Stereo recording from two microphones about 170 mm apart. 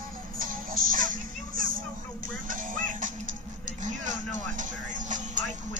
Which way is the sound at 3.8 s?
45° right (ahead or behind).